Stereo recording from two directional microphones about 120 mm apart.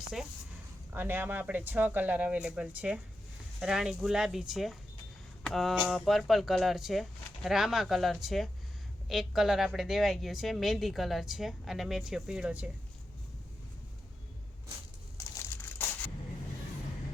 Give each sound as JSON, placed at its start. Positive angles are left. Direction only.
{"t": 0.9, "sound": "a woman's voice", "side_deg": -15}
{"t": 5.4, "sound": "a sound", "side_deg": 5}
{"t": 5.8, "sound": "a woman's voice", "side_deg": 0}
{"t": 15.2, "sound": "crushing", "side_deg": 25}